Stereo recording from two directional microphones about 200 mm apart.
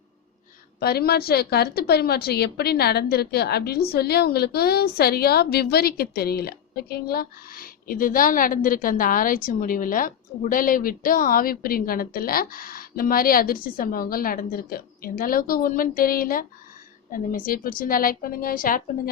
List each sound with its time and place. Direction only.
0.8 s a woman's voice: 50° left (ahead or behind)